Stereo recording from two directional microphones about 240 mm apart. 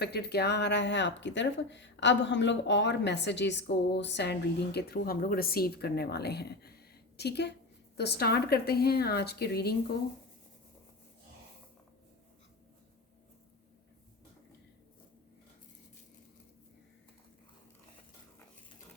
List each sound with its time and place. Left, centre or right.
0.0 s speech: left